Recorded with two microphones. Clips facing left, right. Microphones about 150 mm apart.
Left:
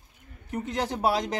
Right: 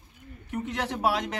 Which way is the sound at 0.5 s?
35° left (ahead or behind).